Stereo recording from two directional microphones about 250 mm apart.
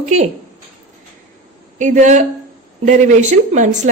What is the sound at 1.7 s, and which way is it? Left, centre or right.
A woman's voice, right.